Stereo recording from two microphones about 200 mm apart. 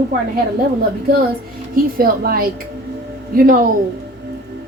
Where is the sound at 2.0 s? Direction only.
50° right (ahead or behind).